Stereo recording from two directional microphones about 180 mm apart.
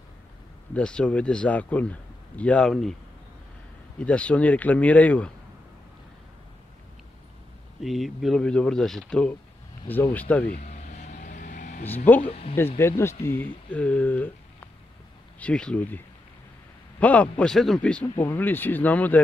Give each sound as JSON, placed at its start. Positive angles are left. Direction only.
{"t": 0.7, "sound": "a man's voice", "side_deg": 5}
{"t": 4.0, "sound": "a man's voice", "side_deg": 5}
{"t": 7.8, "sound": "a man's voice", "side_deg": 0}
{"t": 10.6, "sound": "vehicle", "side_deg": 40}
{"t": 12.3, "sound": "speech", "side_deg": 35}
{"t": 12.7, "sound": "a man's voice", "side_deg": 15}
{"t": 17.0, "sound": "a man's voice", "side_deg": 10}